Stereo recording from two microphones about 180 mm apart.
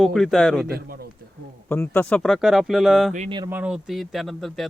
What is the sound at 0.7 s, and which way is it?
Speech, 60° right (ahead or behind).